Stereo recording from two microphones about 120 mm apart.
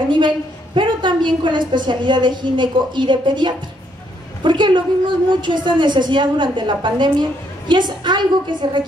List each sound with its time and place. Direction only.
0.7 s a woman's voice: 40° right (ahead or behind)